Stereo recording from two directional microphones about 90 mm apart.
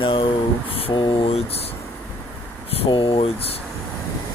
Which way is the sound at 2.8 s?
85° left.